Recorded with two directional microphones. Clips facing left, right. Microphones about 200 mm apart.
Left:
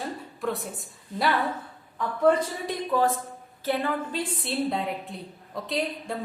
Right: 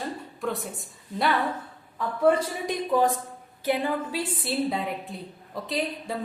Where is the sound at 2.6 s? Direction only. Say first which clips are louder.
Right 2 dB; 15° right (ahead or behind).